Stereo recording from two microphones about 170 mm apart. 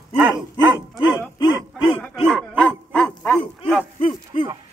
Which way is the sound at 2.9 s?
5° left (ahead or behind).